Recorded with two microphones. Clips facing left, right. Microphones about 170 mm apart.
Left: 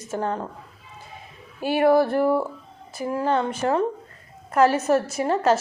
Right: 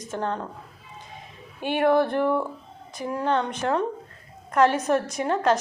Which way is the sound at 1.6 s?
5° left (ahead or behind).